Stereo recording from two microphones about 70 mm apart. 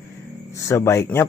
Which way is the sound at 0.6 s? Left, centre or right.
Left.